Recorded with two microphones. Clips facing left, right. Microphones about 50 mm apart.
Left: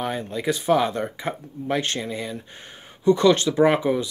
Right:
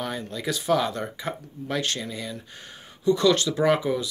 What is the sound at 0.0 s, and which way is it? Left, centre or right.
Speech, left.